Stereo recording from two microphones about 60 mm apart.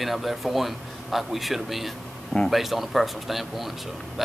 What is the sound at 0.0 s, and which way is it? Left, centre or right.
Speech, centre.